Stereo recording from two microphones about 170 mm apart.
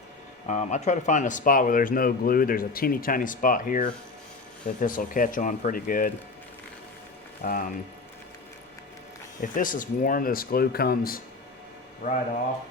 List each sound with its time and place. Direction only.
0.4 s speech: 45° left (ahead or behind)
7.4 s speech: 55° left (ahead or behind)
9.4 s speech: 50° left (ahead or behind)